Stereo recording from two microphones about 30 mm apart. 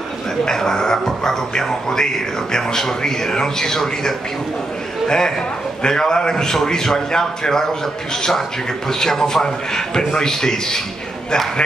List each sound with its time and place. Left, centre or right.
0.5 s a man's voice: centre